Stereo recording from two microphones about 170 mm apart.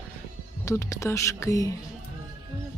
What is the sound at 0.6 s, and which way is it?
Speech, 15° left (ahead or behind).